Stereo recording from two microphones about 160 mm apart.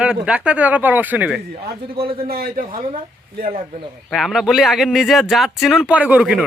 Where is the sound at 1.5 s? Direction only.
75° right (ahead or behind).